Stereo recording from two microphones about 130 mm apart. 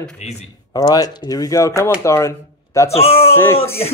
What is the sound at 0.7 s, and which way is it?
Speech, 30° left (ahead or behind).